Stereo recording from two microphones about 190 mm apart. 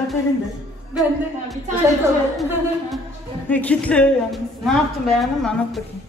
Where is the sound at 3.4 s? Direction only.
10° left (ahead or behind).